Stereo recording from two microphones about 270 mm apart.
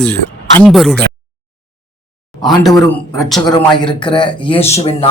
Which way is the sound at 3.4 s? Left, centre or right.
Centre.